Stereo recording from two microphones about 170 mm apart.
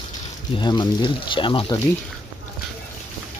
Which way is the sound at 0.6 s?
25° left (ahead or behind).